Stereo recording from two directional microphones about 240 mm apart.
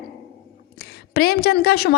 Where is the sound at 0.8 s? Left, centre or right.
Left.